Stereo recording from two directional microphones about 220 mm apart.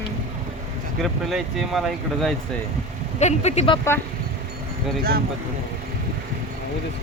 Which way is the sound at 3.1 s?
30° left (ahead or behind).